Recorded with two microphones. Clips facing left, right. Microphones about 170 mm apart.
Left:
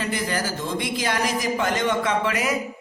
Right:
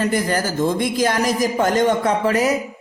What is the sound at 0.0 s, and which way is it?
A woman's voice, 45° right (ahead or behind).